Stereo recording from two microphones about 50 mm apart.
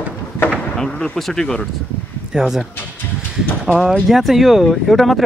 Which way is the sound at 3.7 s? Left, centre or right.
Centre.